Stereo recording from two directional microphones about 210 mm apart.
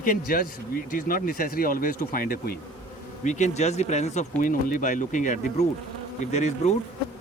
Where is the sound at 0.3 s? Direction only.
45° left (ahead or behind).